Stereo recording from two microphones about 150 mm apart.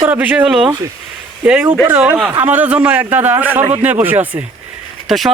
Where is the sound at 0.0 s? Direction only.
10° right (ahead or behind).